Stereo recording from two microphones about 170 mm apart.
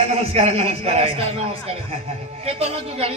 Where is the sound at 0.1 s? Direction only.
35° right (ahead or behind).